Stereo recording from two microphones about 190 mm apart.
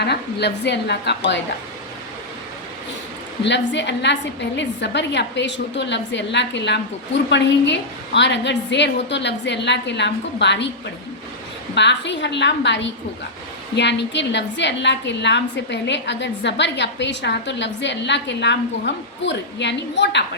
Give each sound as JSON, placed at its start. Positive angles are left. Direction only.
{"t": 0.0, "sound": "a woman's voice", "side_deg": 60}
{"t": 3.4, "sound": "a woman's voice", "side_deg": 70}
{"t": 11.7, "sound": "a woman's voice", "side_deg": 65}